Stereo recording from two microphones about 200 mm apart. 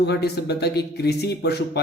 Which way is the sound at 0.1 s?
55° left (ahead or behind).